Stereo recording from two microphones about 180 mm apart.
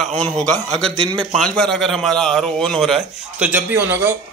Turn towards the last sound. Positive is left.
turn(degrees=-10)  # may be behind; listen again after turning